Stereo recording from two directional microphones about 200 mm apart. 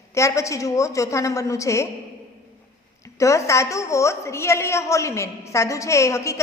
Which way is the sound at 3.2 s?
15° left (ahead or behind).